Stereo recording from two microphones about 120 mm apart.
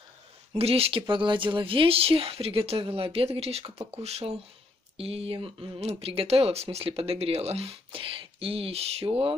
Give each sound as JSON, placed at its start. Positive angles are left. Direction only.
{"t": 0.6, "sound": "speech", "side_deg": -55}